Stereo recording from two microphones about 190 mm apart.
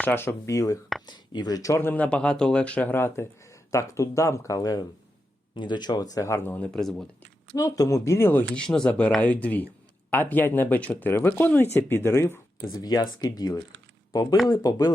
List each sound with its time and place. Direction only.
0.0 s speech: 10° left (ahead or behind)
7.5 s speech: 20° left (ahead or behind)